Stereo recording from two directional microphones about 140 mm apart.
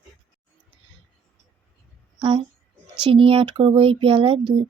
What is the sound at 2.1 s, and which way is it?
A woman's voice, 35° right (ahead or behind).